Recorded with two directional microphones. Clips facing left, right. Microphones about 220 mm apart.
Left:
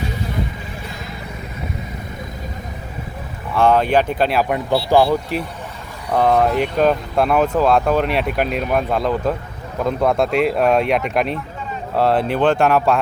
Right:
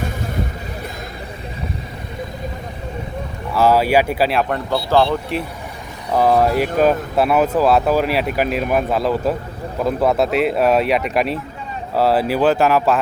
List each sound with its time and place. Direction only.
3.5 s speech: 5° right (ahead or behind)
4.7 s speech: 15° left (ahead or behind)
5.0 s speech: 5° left (ahead or behind)